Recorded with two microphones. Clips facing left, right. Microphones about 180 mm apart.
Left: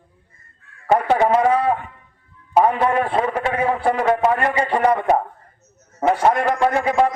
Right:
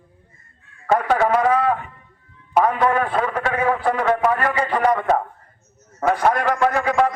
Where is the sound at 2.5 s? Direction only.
25° left (ahead or behind).